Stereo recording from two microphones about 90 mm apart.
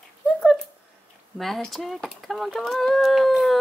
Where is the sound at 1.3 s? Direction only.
Centre (ahead or behind).